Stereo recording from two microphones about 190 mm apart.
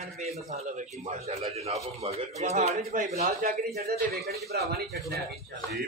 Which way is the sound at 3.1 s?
50° right (ahead or behind).